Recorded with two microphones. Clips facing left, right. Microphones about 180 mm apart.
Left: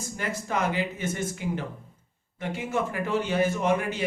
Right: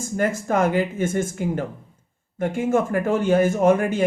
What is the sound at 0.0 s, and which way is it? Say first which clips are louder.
Speech: right 9 dB; 50° right (ahead or behind).